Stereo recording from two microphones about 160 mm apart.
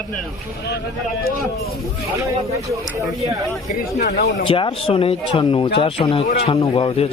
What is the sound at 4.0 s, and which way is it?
Speech, 55° left (ahead or behind).